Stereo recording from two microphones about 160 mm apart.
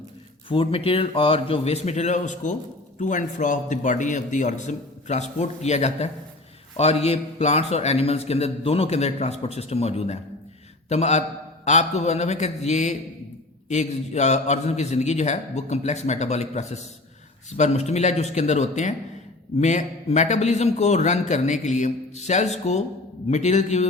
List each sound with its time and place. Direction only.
0.4 s a man's voice: 35° left (ahead or behind)